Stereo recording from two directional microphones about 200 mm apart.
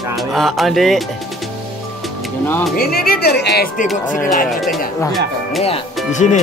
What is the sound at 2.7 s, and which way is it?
Speech, 50° left (ahead or behind).